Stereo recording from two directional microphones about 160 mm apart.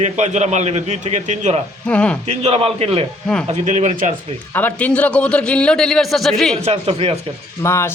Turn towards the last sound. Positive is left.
turn(degrees=15)  # may be behind; listen again after turning